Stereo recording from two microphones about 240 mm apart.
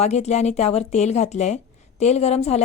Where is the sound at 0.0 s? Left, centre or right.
Left.